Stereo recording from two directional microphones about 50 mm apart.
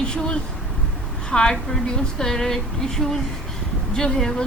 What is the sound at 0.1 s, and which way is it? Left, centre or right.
Speech, centre.